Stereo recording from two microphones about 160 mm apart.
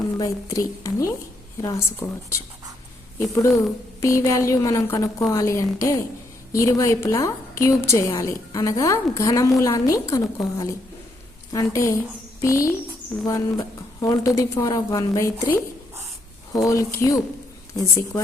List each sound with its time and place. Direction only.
0.2 s a woman's voice: 20° left (ahead or behind)